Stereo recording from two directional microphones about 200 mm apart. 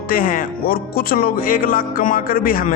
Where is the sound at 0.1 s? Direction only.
45° left (ahead or behind).